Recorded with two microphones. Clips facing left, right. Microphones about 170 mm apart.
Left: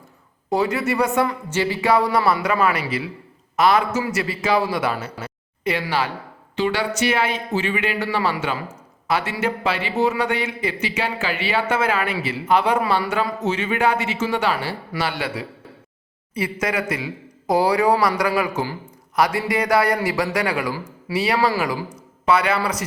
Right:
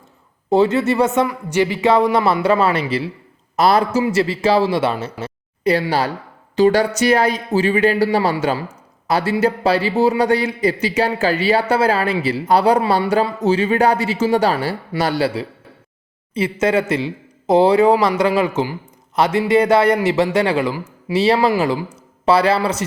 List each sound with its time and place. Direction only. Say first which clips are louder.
0.5 s a man's voice: right 6 dB; 25° right (ahead or behind)
5.7 s a man's voice: right 4 dB; 35° right (ahead or behind)
16.3 s a man's voice: right 7 dB; 25° right (ahead or behind)